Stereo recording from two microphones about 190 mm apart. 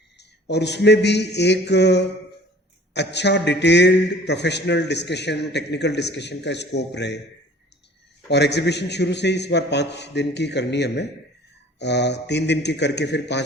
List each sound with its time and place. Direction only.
0.2 s a man's voice: 60° left (ahead or behind)
8.3 s a man's voice: 65° left (ahead or behind)